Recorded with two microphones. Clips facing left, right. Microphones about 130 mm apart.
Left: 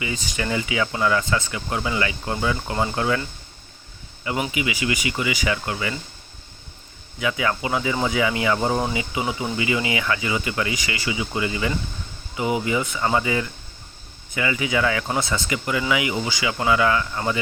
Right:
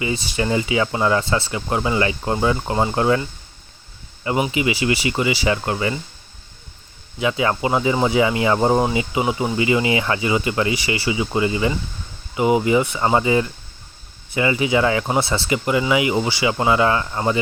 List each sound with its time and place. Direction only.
0.0 s speech: 30° right (ahead or behind)
4.4 s speech: 30° right (ahead or behind)
7.2 s speech: 25° right (ahead or behind)